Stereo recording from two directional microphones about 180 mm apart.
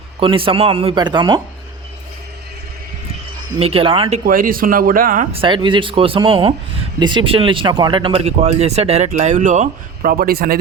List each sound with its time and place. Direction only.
0.2 s speech: 30° right (ahead or behind)
3.6 s speech: 30° right (ahead or behind)
4.3 s speech: 50° right (ahead or behind)
5.3 s speech: 30° right (ahead or behind); by 10.6 s 55° right (ahead or behind)